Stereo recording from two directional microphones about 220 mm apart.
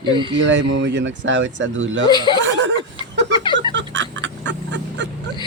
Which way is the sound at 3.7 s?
55° right (ahead or behind).